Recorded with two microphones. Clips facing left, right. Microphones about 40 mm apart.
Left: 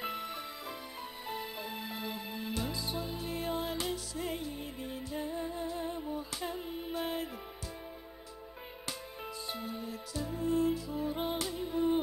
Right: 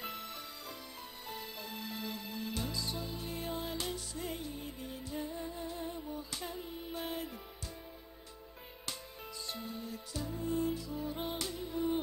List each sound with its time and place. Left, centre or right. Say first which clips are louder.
0.0 s music: left 5 dB; centre
6.3 s a sound: left 4 dB; centre
6.9 s music: left 4 dB; centre
9.5 s music: left 2 dB; centre
10.1 s music: left 4 dB; centre